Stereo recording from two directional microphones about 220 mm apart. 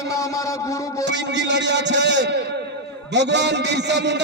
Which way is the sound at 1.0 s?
55° right (ahead or behind).